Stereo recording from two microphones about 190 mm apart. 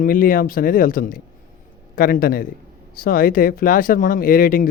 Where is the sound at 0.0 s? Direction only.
45° left (ahead or behind).